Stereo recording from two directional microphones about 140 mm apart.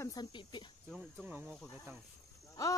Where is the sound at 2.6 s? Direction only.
25° left (ahead or behind).